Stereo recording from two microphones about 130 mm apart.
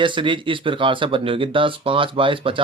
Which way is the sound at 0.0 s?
40° right (ahead or behind).